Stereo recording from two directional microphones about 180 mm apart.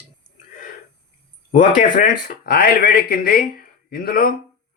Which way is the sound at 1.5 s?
45° left (ahead or behind).